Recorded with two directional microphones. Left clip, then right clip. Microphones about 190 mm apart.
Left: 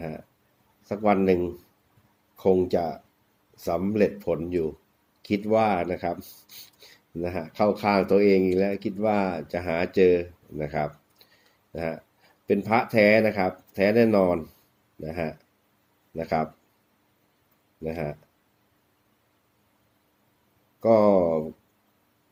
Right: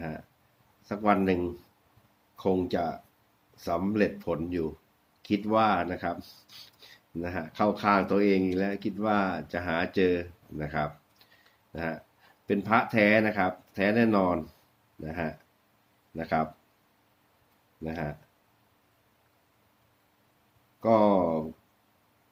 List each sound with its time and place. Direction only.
0.9 s speech: 15° left (ahead or behind)
17.8 s speech: 15° left (ahead or behind)
20.8 s speech: 15° left (ahead or behind)